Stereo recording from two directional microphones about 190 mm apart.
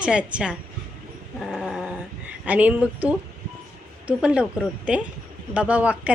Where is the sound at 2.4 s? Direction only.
5° right (ahead or behind).